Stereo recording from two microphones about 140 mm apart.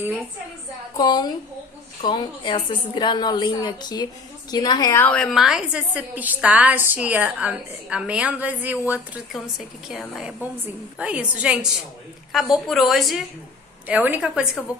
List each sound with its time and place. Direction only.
0.9 s a woman's voice: 30° left (ahead or behind)
5.0 s a woman's voice: 5° left (ahead or behind)
13.8 s a woman's voice: 10° right (ahead or behind)